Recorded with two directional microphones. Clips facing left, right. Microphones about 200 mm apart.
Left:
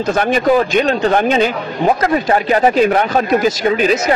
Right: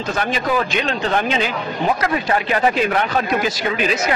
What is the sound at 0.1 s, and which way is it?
Speech, 50° left (ahead or behind).